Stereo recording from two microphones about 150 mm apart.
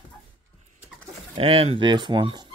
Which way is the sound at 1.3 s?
40° right (ahead or behind).